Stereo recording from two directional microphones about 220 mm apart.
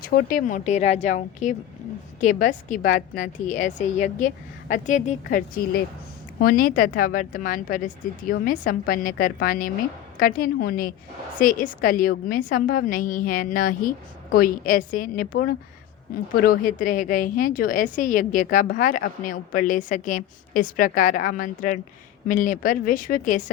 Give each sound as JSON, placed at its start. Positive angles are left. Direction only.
{"t": 0.0, "sound": "a woman's voice", "side_deg": 40}